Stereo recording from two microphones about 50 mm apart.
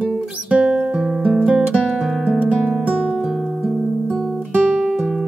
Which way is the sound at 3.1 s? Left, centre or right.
Centre.